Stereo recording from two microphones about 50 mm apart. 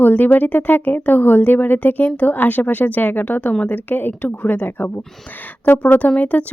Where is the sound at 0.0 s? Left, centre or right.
Left.